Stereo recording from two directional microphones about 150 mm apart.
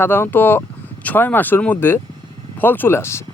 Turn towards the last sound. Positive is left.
turn(degrees=15)  # may be behind; listen again after turning